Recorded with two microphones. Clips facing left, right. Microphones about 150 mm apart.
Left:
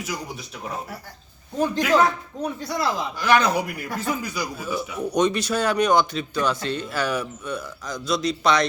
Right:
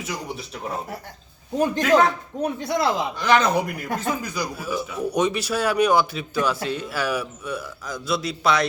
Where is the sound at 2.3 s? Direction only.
20° right (ahead or behind).